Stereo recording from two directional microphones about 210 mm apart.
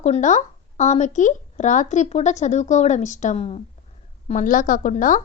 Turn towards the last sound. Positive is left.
turn(degrees=40)  # may be behind; listen again after turning